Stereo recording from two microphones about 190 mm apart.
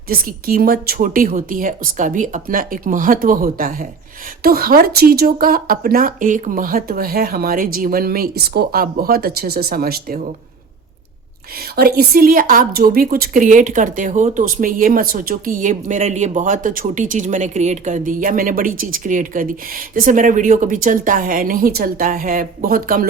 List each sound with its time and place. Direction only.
0.1 s a woman's voice: 50° right (ahead or behind)
11.8 s a woman's voice: 50° right (ahead or behind)